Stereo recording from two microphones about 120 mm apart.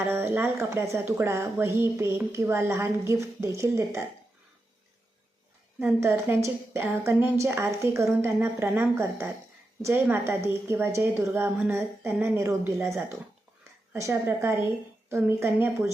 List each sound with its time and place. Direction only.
0.0 s speech: 20° right (ahead or behind)
5.8 s speech: 20° right (ahead or behind)